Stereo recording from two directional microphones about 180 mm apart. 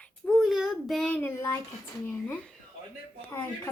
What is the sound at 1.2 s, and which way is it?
A child's voice, 15° left (ahead or behind).